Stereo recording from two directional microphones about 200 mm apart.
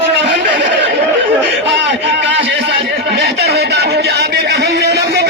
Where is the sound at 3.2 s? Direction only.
50° right (ahead or behind).